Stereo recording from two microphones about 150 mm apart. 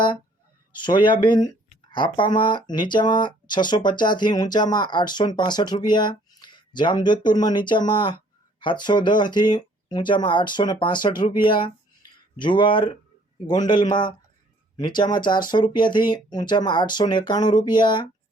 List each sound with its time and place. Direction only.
0.7 s speech: 30° left (ahead or behind)